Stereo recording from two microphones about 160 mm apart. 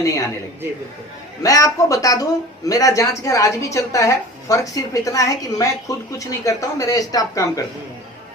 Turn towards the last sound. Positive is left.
turn(degrees=20)  # may be behind; listen again after turning